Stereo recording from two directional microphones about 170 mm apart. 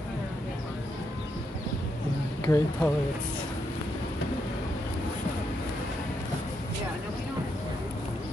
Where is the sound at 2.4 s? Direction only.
15° left (ahead or behind).